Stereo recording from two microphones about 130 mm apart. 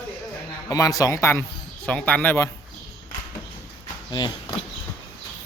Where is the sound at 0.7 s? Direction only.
25° left (ahead or behind).